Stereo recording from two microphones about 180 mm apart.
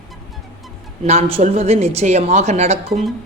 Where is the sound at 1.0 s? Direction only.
35° right (ahead or behind).